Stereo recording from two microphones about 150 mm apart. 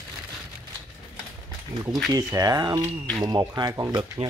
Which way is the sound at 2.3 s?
25° right (ahead or behind).